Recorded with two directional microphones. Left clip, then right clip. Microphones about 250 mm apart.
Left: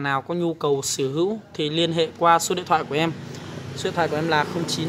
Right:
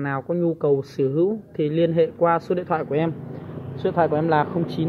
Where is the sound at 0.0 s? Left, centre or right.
Centre.